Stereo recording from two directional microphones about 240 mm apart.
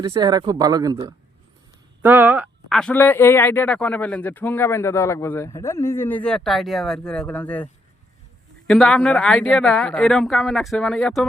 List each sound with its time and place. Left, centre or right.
0.0 s speech: centre
8.6 s speech: centre